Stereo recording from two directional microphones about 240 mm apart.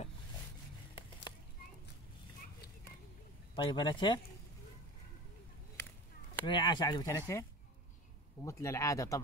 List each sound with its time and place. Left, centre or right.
3.5 s speech: centre
6.4 s speech: centre
8.5 s speech: centre